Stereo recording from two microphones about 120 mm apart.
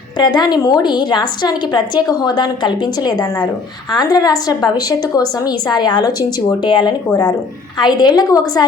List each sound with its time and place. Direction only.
0.2 s a woman's voice: 35° left (ahead or behind)